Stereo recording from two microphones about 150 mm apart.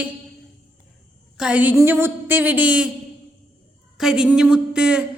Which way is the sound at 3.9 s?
5° right (ahead or behind).